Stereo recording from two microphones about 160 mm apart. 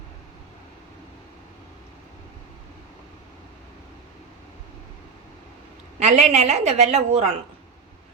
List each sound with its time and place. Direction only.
6.0 s a woman's voice: 45° right (ahead or behind)